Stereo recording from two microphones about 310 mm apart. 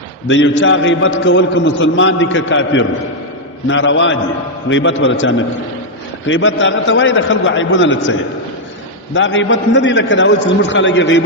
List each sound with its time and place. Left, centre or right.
0.3 s a man's voice: left
9.1 s a man's voice: left